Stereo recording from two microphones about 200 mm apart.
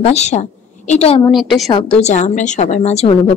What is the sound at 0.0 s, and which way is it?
A woman's voice, 35° left (ahead or behind).